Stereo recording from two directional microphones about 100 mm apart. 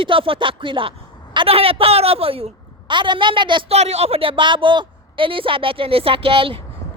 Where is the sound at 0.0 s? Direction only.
60° right (ahead or behind).